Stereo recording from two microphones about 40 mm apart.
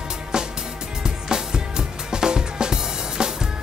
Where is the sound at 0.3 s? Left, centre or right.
Centre.